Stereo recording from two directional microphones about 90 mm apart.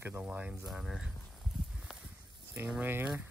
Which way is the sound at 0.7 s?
5° right (ahead or behind).